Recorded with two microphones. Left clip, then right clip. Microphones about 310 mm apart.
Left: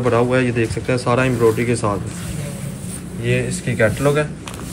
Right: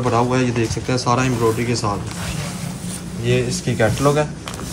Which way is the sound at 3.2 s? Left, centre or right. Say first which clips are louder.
Right 1 dB; centre.